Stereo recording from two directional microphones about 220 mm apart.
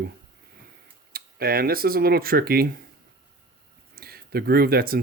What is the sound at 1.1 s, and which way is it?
Speech, 45° right (ahead or behind).